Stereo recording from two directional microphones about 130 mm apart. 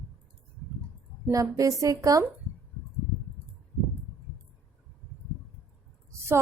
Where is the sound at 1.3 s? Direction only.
25° right (ahead or behind).